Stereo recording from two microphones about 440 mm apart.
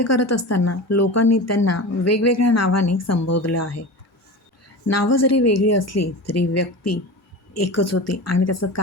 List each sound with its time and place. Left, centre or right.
0.0 s speech: left
4.9 s speech: left